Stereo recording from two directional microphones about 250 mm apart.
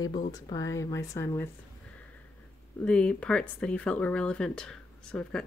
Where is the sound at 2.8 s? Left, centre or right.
Centre.